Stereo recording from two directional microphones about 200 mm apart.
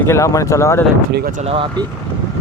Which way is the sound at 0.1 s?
15° left (ahead or behind).